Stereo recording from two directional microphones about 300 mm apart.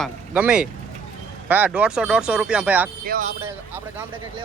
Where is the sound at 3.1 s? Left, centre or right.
Right.